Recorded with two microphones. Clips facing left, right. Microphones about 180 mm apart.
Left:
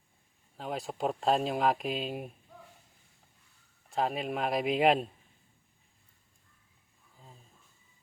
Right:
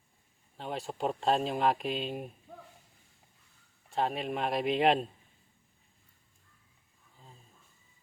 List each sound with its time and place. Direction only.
0.5 s speech: 5° left (ahead or behind)
3.8 s speech: centre (ahead or behind)